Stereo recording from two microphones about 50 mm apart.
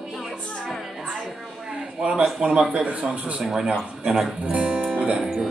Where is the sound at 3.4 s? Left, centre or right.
Centre.